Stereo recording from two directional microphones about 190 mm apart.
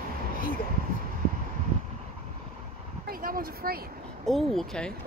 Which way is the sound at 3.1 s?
50° right (ahead or behind).